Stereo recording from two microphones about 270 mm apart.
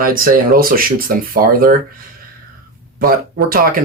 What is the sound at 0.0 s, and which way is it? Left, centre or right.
Speech, right.